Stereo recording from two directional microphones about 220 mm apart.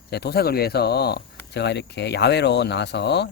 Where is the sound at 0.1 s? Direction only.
45° left (ahead or behind).